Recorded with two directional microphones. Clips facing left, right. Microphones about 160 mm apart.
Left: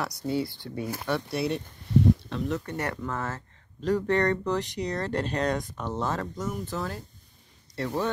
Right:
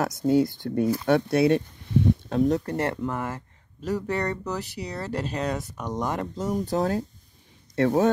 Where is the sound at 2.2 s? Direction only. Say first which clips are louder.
Right 8 dB; 40° right (ahead or behind); by 6.2 s 15° right (ahead or behind).